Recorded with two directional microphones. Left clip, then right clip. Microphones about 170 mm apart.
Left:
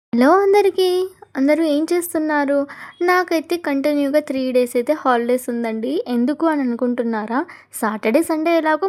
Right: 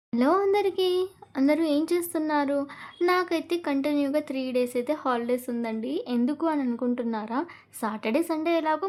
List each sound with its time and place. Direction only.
0.1 s speech: 40° left (ahead or behind)